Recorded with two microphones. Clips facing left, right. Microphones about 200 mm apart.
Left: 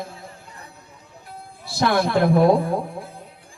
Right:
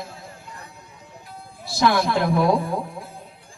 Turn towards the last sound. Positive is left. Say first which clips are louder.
# left 3 dB
turn(degrees=55)  # may be behind; listen again after turning